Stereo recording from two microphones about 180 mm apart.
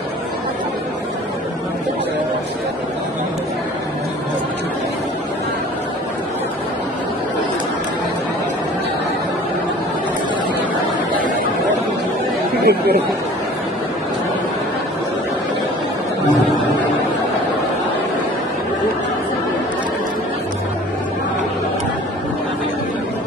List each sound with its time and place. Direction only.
12.6 s chatter: 60° right (ahead or behind)